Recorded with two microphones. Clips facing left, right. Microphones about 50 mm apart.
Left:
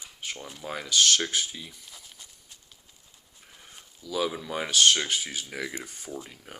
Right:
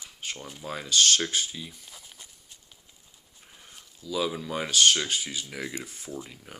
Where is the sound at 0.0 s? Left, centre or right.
Left.